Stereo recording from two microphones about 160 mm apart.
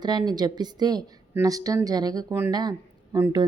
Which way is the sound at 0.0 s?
25° right (ahead or behind).